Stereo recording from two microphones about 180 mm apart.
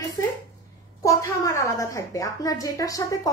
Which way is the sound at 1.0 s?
15° left (ahead or behind).